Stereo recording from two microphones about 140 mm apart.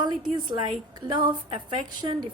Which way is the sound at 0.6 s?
35° right (ahead or behind).